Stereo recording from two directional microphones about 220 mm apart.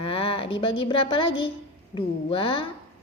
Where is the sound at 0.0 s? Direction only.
25° left (ahead or behind).